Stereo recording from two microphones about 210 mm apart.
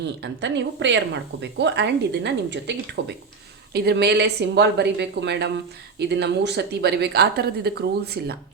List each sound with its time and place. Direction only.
0.0 s a woman's voice: 55° right (ahead or behind)